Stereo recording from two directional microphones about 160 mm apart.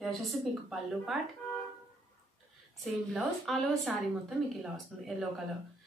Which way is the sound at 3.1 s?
Centre (ahead or behind).